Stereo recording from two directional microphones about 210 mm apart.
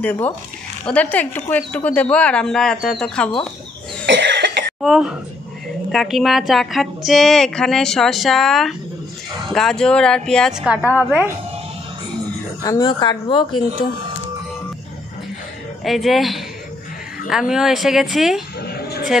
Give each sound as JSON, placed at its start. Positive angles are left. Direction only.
{"t": 0.0, "sound": "a woman's voice", "side_deg": 5}
{"t": 4.0, "sound": "cough", "side_deg": -55}
{"t": 4.8, "sound": "a woman's voice", "side_deg": 0}
{"t": 10.8, "sound": "speech", "side_deg": 10}
{"t": 12.6, "sound": "speech", "side_deg": 20}
{"t": 15.8, "sound": "a woman's voice", "side_deg": 0}